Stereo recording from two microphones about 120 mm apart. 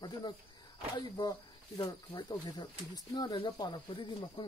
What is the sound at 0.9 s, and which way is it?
Speech, 30° left (ahead or behind).